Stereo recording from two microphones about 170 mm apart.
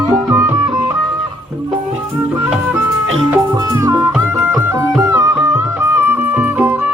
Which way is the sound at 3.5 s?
20° right (ahead or behind).